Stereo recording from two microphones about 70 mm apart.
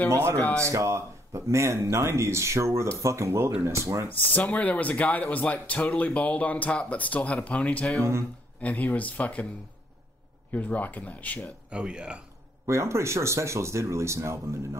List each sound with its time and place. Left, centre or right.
0.1 s speech: right
4.1 s speech: left
8.0 s speech: right
8.5 s speech: left
10.5 s speech: left
11.7 s speech: centre
12.6 s speech: right